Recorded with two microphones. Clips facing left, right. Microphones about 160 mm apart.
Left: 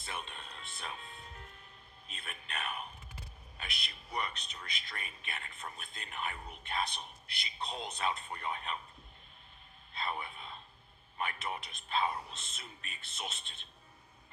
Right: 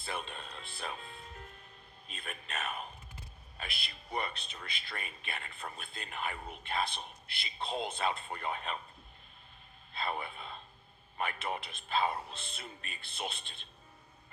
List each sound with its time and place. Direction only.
0.0 s speech: 35° right (ahead or behind)
9.9 s a sound: 30° right (ahead or behind)
11.3 s speech: 35° right (ahead or behind)